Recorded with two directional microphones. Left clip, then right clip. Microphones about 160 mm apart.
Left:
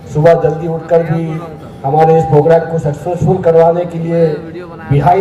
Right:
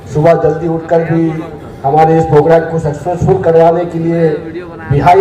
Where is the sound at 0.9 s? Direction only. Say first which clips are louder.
Even; 15° left (ahead or behind).